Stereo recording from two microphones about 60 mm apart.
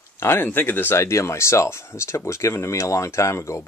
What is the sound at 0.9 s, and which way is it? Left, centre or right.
Speech, left.